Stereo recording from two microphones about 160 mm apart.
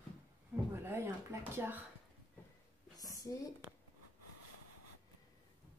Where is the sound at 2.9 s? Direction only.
20° left (ahead or behind).